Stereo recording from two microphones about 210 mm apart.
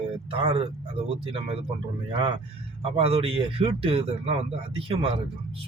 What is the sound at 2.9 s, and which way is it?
A man's voice, 25° right (ahead or behind).